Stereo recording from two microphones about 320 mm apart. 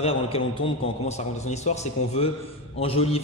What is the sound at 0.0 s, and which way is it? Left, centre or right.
A man's voice, centre.